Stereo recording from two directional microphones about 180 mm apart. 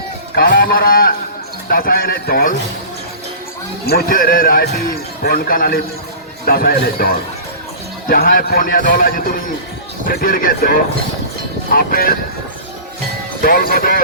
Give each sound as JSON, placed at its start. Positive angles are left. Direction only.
{"t": 0.5, "sound": "a man's voice", "side_deg": 55}
{"t": 3.8, "sound": "a man's voice", "side_deg": 55}
{"t": 13.4, "sound": "a man's voice", "side_deg": 55}